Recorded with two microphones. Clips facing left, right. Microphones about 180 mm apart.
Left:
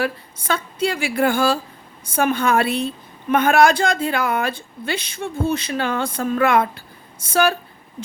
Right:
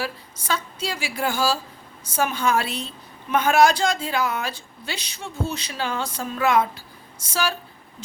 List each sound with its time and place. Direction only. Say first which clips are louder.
0.0 s a woman's voice: left 7 dB; 55° left (ahead or behind)